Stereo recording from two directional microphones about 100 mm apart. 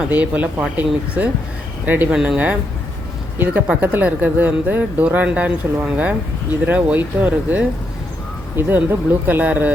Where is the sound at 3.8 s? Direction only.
15° right (ahead or behind).